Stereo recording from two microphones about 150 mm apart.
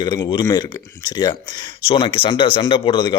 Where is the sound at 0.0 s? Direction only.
30° left (ahead or behind).